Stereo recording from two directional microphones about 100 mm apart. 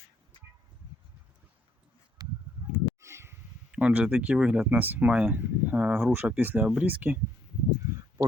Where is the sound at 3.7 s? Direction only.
10° right (ahead or behind).